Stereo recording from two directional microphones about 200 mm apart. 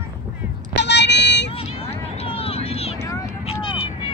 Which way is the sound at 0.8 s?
60° left (ahead or behind).